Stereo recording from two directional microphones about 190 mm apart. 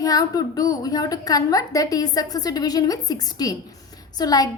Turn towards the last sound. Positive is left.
turn(degrees=20)  # may be behind; listen again after turning